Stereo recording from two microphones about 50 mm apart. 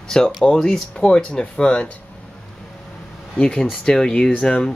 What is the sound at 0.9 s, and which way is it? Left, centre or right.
Speech, centre.